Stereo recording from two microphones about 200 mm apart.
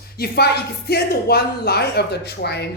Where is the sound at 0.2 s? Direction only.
55° left (ahead or behind).